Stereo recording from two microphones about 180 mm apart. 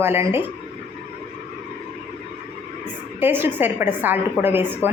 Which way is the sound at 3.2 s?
10° right (ahead or behind).